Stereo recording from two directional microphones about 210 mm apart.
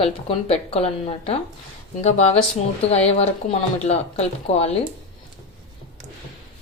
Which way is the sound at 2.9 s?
30° left (ahead or behind).